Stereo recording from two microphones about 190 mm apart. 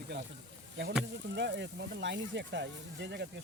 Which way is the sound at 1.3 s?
65° right (ahead or behind).